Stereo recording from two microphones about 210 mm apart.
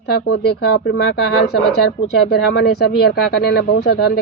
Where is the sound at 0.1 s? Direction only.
50° left (ahead or behind).